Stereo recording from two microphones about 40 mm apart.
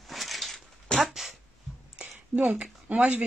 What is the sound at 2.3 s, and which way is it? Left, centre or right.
Speech, right.